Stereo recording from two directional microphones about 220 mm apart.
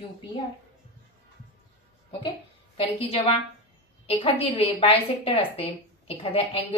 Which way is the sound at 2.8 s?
25° left (ahead or behind).